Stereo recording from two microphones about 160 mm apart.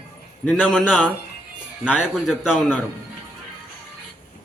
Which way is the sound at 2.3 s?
5° right (ahead or behind).